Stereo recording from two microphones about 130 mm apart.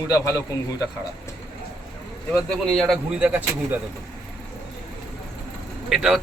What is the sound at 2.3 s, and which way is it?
Speech, centre (ahead or behind).